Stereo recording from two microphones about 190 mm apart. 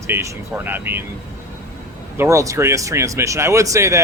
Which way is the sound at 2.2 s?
15° right (ahead or behind).